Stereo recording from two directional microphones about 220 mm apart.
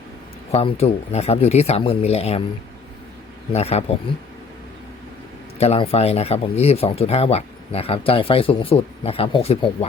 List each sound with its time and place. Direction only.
0.5 s speech: 30° left (ahead or behind)
3.5 s speech: 30° left (ahead or behind)
5.5 s speech: 30° left (ahead or behind)